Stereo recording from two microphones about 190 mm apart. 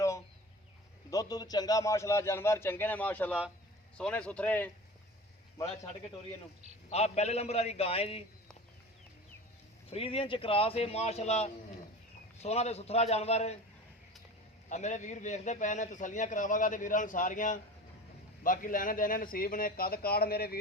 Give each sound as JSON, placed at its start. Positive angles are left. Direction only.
{"t": 1.1, "sound": "a man's voice", "side_deg": 20}
{"t": 6.9, "sound": "a man's voice", "side_deg": 35}
{"t": 9.9, "sound": "a man's voice", "side_deg": 30}
{"t": 14.7, "sound": "a man's voice", "side_deg": 40}